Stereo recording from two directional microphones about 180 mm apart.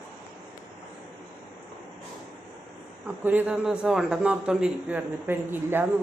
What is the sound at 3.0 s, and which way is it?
A man's voice, 10° right (ahead or behind).